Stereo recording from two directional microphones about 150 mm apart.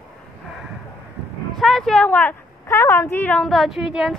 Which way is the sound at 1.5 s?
Centre (ahead or behind).